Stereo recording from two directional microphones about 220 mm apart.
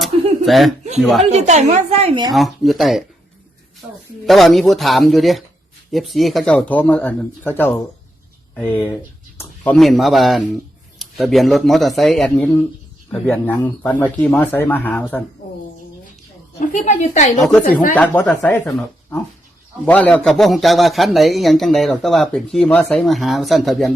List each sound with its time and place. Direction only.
0.0 s chuckle: centre (ahead or behind)
1.3 s a woman's voice: 30° right (ahead or behind)
2.3 s a man's voice: centre (ahead or behind)
16.6 s a woman's voice: 30° left (ahead or behind)
17.9 s a man's voice: 10° left (ahead or behind)